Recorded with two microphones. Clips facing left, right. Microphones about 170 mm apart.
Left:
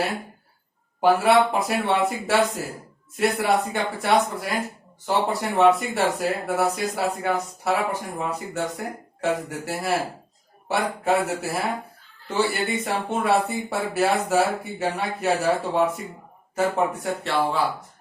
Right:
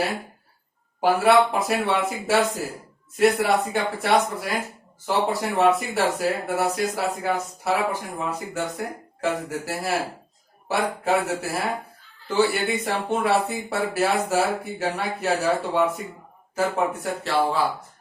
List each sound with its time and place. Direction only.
1.0 s speech: centre (ahead or behind)